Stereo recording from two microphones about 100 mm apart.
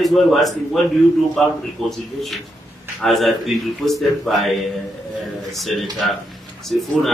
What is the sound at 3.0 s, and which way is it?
Speech, centre (ahead or behind).